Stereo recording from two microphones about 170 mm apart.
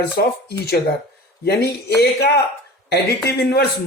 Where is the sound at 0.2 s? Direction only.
75° left (ahead or behind).